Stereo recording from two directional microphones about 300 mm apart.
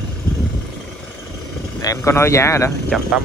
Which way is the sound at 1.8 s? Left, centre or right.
Centre.